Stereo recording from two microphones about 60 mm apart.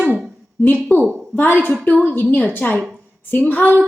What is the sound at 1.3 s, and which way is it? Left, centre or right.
A woman's voice, left.